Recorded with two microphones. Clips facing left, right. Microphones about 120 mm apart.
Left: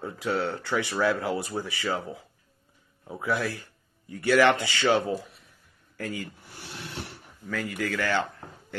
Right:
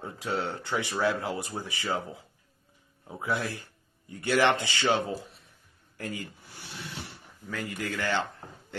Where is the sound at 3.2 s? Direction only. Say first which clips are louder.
Left 3 dB; 25° right (ahead or behind).